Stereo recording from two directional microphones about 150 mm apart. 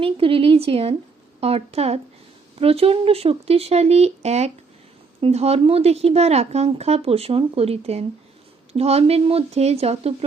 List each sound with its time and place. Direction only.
0.0 s a woman's voice: 35° right (ahead or behind)